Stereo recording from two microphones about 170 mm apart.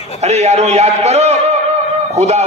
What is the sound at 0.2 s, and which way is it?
A man's voice, 40° right (ahead or behind).